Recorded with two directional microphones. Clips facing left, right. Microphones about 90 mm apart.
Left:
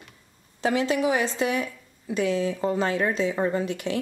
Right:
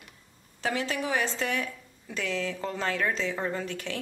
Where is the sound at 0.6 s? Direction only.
20° left (ahead or behind).